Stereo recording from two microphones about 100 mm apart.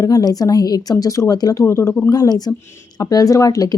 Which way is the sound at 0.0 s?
35° left (ahead or behind).